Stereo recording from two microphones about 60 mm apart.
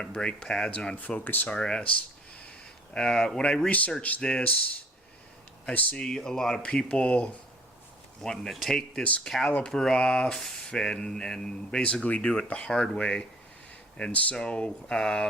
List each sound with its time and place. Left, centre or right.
0.0 s speech: centre
0.9 s speech: left
1.5 s speech: centre
4.2 s speech: centre
5.6 s speech: left
6.0 s speech: centre
8.2 s speech: centre
12.0 s speech: left
12.5 s speech: centre